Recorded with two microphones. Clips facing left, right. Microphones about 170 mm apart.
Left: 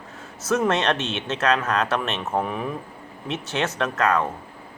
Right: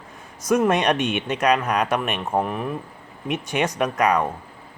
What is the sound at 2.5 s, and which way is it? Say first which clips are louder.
Speech: right 1 dB; centre (ahead or behind).